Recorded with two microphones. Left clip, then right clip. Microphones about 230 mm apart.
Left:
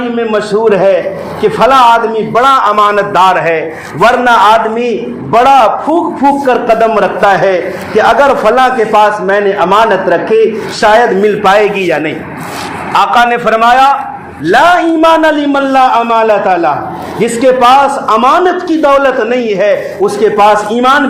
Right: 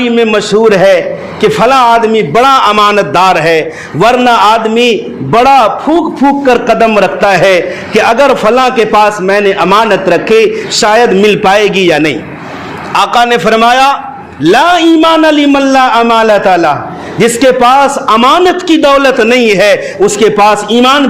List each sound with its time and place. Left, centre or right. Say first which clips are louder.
0.2 s a man's voice: right 3 dB; right
4.0 s a man's voice: even; right